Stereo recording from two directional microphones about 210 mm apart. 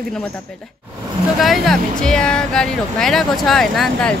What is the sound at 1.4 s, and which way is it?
Speech, centre (ahead or behind).